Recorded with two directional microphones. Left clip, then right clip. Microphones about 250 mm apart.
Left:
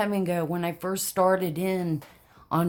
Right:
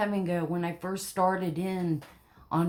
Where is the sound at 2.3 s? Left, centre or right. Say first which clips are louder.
Left 3 dB; left.